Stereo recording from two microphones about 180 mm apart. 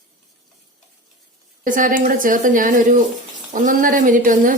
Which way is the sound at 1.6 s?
45° right (ahead or behind).